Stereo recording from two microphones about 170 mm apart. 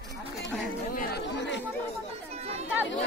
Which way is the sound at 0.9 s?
70° left (ahead or behind).